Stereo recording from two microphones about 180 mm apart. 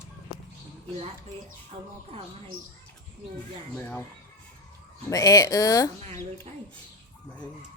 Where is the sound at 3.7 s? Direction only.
10° left (ahead or behind).